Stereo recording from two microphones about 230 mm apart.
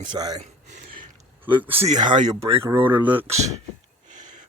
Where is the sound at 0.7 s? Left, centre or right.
Right.